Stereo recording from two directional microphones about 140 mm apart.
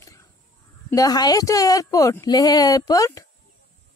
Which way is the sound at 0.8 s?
25° left (ahead or behind).